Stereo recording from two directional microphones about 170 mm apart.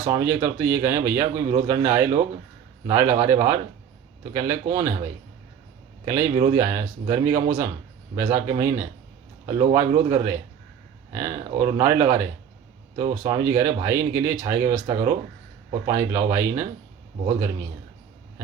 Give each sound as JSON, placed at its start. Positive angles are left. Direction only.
{"t": 0.1, "sound": "speech", "side_deg": -15}
{"t": 4.7, "sound": "speech", "side_deg": -20}
{"t": 6.1, "sound": "speech", "side_deg": -15}